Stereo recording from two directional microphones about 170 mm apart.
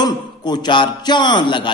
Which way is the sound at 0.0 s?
25° left (ahead or behind).